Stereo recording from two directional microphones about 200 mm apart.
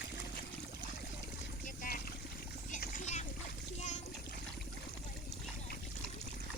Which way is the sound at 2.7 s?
40° left (ahead or behind).